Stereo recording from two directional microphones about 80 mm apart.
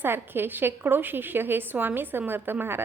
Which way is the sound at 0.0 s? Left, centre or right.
Right.